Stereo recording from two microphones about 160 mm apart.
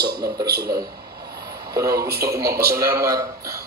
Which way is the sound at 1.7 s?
20° right (ahead or behind).